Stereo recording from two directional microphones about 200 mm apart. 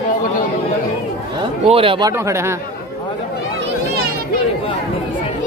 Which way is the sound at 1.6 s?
25° right (ahead or behind).